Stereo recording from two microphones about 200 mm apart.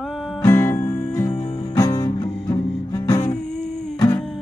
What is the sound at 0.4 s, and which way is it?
Music, 15° left (ahead or behind).